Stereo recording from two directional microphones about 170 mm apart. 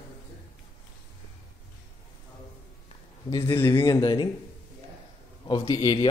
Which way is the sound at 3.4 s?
15° left (ahead or behind).